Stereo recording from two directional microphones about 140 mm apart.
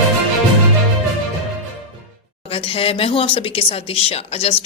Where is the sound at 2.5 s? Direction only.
45° left (ahead or behind).